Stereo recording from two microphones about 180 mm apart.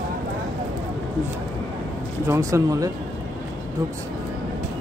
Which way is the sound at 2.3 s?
15° right (ahead or behind).